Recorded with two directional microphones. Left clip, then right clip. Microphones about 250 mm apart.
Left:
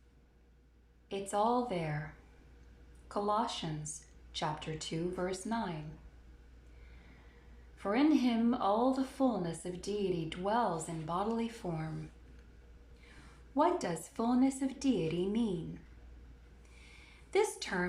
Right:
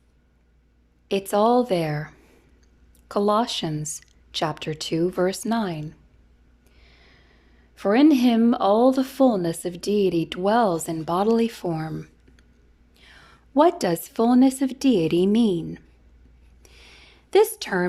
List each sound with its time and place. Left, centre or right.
1.1 s speech: right
3.1 s speech: right
7.8 s speech: right
13.5 s speech: right
17.3 s speech: right